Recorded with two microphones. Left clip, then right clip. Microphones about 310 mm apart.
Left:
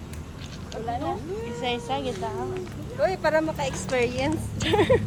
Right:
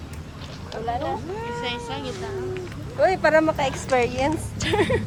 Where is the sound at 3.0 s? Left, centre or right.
Right.